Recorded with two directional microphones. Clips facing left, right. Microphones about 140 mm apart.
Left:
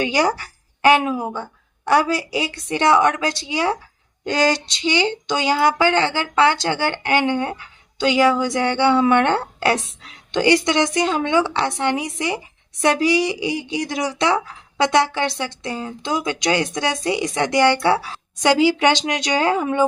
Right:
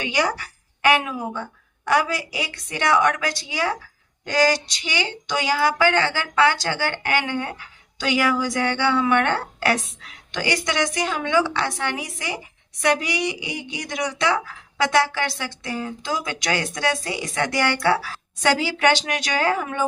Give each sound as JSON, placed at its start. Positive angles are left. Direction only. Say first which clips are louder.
{"t": 0.0, "sound": "a woman's voice", "louder": "left 4 dB", "side_deg": 35}